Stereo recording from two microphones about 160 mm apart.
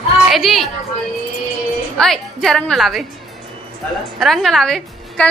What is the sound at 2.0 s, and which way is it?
A woman's voice, 5° left (ahead or behind).